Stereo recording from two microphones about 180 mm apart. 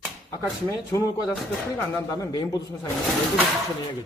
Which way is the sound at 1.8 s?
15° left (ahead or behind).